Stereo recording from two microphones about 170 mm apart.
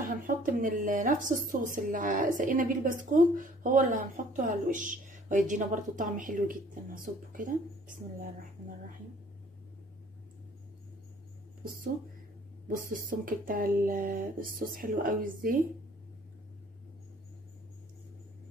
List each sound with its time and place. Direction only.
0.0 s a woman's voice: 50° right (ahead or behind)
12.6 s speech: 55° right (ahead or behind)